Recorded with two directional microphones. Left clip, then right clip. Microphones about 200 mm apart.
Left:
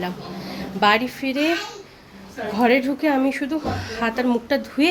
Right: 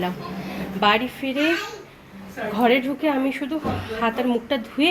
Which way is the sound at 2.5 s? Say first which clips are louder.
Left 1 dB; 20° left (ahead or behind).